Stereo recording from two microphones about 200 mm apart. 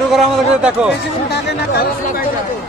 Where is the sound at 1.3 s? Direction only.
50° left (ahead or behind).